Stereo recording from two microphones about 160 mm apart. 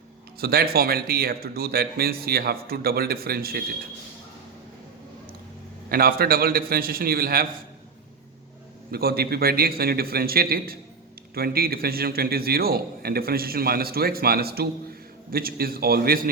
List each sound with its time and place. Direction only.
0.3 s a man's voice: 75° right (ahead or behind)
5.9 s a man's voice: 70° right (ahead or behind)
8.9 s a man's voice: 75° right (ahead or behind)